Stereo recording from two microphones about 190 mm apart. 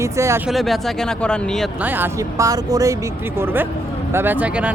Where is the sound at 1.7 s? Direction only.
10° right (ahead or behind).